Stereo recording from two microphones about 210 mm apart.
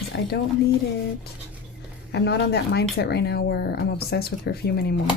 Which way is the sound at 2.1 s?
55° left (ahead or behind).